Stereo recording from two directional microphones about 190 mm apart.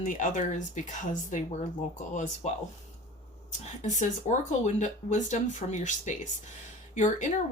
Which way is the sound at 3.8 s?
40° left (ahead or behind).